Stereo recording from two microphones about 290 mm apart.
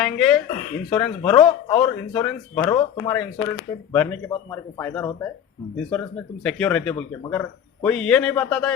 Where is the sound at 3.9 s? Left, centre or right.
Centre.